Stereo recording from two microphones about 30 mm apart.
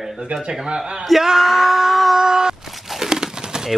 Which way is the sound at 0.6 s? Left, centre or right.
Right.